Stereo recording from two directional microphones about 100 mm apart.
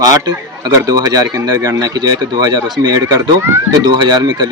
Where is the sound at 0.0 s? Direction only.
40° right (ahead or behind).